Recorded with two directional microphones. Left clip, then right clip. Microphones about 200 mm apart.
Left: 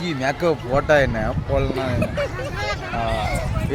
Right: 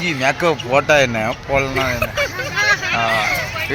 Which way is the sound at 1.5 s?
Centre (ahead or behind).